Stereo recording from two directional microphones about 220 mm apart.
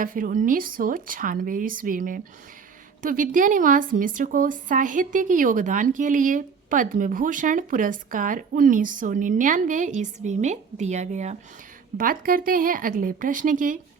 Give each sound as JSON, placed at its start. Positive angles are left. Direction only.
{"t": 0.0, "sound": "a woman's voice", "side_deg": -40}